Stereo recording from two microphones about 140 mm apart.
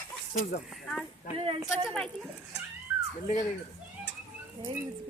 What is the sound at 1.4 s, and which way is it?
Speech, 40° right (ahead or behind).